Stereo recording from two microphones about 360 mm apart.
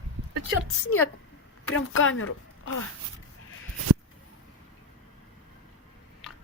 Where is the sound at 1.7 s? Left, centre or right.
Left.